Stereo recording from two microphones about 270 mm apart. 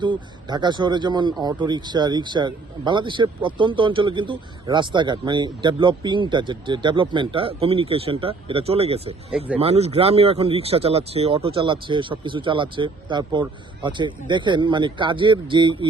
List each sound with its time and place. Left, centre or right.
0.0 s speech: centre